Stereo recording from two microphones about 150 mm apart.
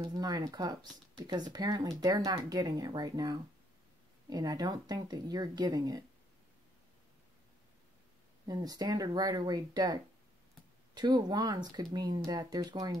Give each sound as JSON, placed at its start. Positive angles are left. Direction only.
{"t": 0.0, "sound": "speech", "side_deg": -25}
{"t": 8.5, "sound": "speech", "side_deg": -25}
{"t": 11.0, "sound": "speech", "side_deg": -30}